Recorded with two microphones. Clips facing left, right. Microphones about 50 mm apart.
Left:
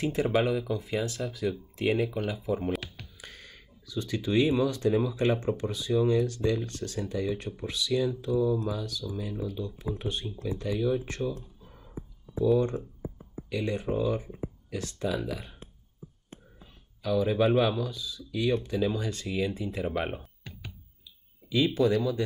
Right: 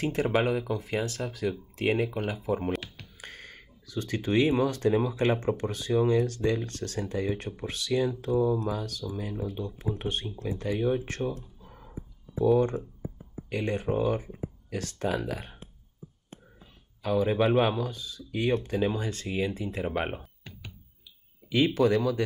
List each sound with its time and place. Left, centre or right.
0.0 s speech: right
1.8 s speech: right
2.7 s computer keyboard: centre
3.2 s a sound: right
4.9 s speech: right
11.6 s a sound: right
13.5 s speech: right
17.0 s speech: right
21.0 s clicking: right